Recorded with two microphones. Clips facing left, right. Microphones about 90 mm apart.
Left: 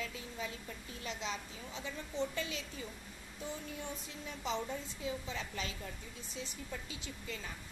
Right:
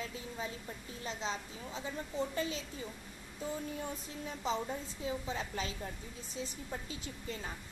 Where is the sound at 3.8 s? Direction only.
35° right (ahead or behind).